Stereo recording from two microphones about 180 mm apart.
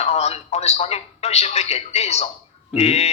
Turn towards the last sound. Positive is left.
turn(degrees=35)  # may be behind; listen again after turning